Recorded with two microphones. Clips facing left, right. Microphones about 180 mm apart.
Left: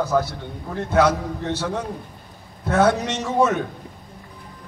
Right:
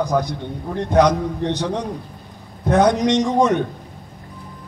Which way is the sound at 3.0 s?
5° left (ahead or behind).